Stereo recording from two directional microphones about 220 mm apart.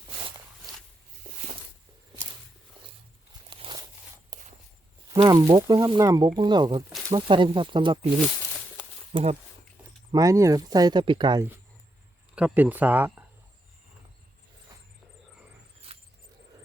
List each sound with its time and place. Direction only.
1.2 s a sound: 40° right (ahead or behind)
3.5 s a sound: 20° right (ahead or behind)
4.3 s walk: 15° right (ahead or behind)
5.1 s speech: 20° right (ahead or behind)
9.1 s speech: 25° right (ahead or behind)
10.1 s speech: 15° right (ahead or behind)
12.3 s speech: 5° right (ahead or behind)